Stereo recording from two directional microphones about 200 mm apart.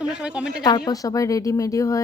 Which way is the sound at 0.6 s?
20° left (ahead or behind).